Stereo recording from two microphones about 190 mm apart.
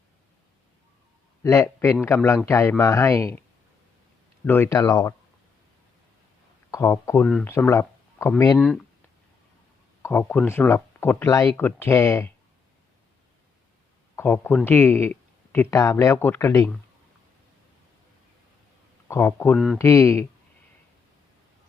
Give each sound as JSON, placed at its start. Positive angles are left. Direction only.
{"t": 1.4, "sound": "speech", "side_deg": 15}
{"t": 4.4, "sound": "speech", "side_deg": 10}
{"t": 6.7, "sound": "speech", "side_deg": 15}
{"t": 8.5, "sound": "speech", "side_deg": 0}
{"t": 10.0, "sound": "speech", "side_deg": 10}
{"t": 14.2, "sound": "speech", "side_deg": 10}
{"t": 19.0, "sound": "speech", "side_deg": 15}
{"t": 19.5, "sound": "speech", "side_deg": 0}
{"t": 19.8, "sound": "speech", "side_deg": 15}